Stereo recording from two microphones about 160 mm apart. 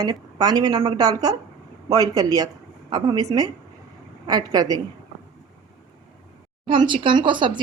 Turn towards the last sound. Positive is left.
turn(degrees=-30)  # may be behind; listen again after turning